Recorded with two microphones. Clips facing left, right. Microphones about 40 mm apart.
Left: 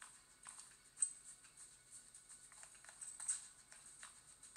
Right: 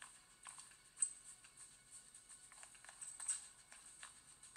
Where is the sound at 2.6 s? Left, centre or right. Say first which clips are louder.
Right 2 dB; right.